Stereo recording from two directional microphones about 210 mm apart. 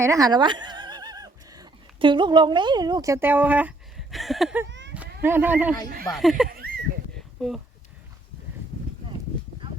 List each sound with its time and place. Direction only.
0.0 s speech: 15° right (ahead or behind); by 7.5 s centre (ahead or behind)